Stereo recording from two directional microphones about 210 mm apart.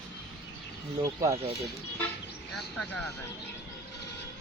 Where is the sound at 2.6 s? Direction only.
5° left (ahead or behind).